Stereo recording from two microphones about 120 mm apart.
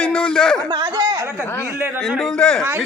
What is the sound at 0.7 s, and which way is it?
Speech, 30° right (ahead or behind).